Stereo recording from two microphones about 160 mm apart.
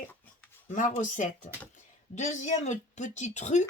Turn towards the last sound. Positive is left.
turn(degrees=45)  # may be behind; listen again after turning